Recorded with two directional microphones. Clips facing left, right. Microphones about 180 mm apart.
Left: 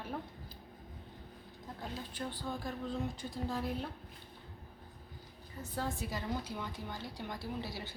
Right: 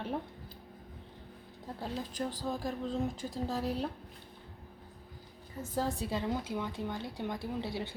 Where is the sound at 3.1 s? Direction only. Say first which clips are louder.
Right 4 dB; 90° right.